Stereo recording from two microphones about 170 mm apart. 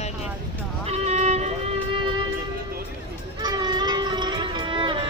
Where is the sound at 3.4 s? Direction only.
25° right (ahead or behind).